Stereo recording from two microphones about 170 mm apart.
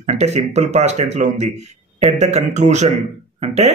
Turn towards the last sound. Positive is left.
turn(degrees=-40)  # may be behind; listen again after turning